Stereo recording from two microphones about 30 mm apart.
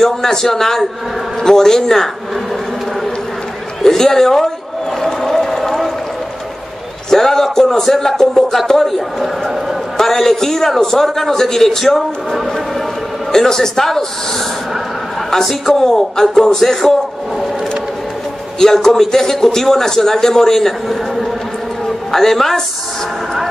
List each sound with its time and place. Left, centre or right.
0.0 s a man's voice: centre
3.8 s a man's voice: centre
5.0 s run: centre
7.1 s a man's voice: centre
9.9 s a man's voice: centre
15.4 s a man's voice: centre
18.6 s a man's voice: centre
22.1 s a man's voice: centre